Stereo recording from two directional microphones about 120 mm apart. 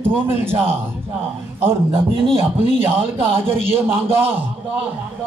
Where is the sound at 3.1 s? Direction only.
50° right (ahead or behind).